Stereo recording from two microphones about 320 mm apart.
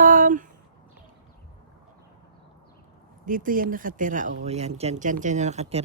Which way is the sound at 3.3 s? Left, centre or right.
Right.